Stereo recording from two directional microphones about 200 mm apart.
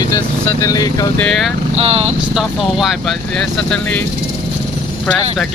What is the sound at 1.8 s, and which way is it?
Speech, 30° right (ahead or behind).